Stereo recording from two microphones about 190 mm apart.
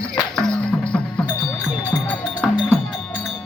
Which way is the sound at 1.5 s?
20° left (ahead or behind).